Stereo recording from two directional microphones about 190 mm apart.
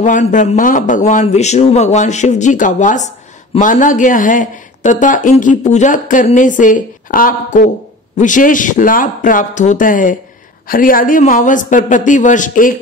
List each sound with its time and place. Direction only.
0.0 s a man's voice: 40° left (ahead or behind)